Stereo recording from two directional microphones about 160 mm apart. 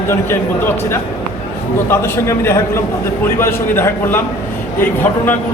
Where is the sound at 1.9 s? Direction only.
15° left (ahead or behind).